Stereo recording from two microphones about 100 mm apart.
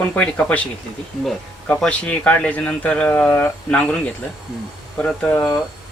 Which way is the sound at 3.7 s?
10° left (ahead or behind).